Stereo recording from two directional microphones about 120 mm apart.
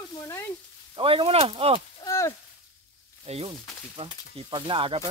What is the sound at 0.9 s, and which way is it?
Speech, 50° right (ahead or behind).